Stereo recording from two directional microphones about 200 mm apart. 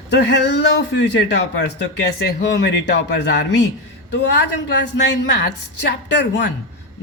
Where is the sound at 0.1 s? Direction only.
60° left (ahead or behind).